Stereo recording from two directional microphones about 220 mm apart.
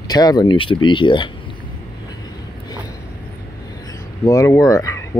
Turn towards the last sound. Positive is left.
turn(degrees=15)  # may be behind; listen again after turning